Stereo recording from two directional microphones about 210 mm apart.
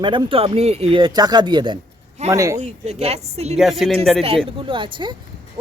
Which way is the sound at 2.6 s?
35° right (ahead or behind).